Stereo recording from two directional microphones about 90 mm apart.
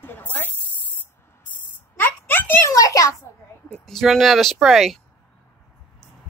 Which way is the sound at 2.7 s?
40° left (ahead or behind).